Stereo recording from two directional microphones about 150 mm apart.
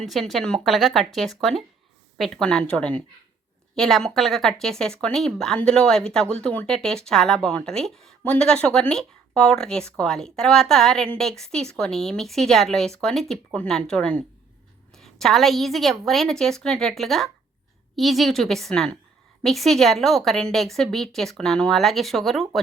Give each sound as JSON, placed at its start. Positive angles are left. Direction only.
{"t": 0.0, "sound": "speech", "side_deg": 0}